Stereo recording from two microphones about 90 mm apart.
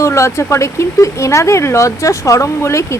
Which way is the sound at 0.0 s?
35° left (ahead or behind).